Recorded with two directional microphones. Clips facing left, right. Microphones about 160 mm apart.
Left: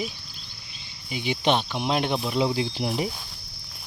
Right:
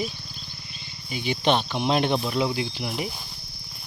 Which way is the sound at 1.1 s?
15° left (ahead or behind).